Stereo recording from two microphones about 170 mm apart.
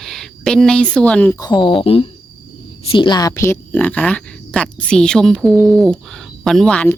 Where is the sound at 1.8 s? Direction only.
35° left (ahead or behind); by 6.9 s 5° left (ahead or behind).